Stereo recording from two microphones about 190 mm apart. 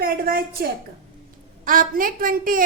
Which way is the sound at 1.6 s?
45° right (ahead or behind).